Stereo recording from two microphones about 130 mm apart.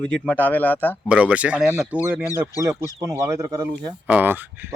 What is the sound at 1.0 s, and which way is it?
Speech, 10° right (ahead or behind).